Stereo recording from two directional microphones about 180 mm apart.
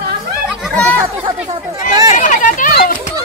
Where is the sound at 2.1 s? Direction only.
45° left (ahead or behind).